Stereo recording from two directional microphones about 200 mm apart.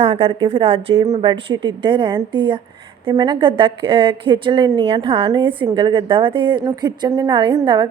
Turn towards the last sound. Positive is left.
turn(degrees=-20)  # may be behind; listen again after turning